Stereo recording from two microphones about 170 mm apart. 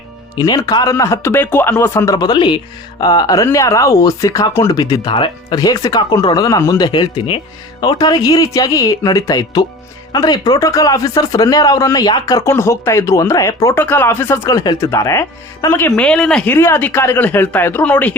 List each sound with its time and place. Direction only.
0.3 s speech: 25° left (ahead or behind)